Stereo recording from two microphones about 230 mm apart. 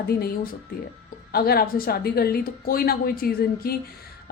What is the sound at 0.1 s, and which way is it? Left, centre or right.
Speech, left.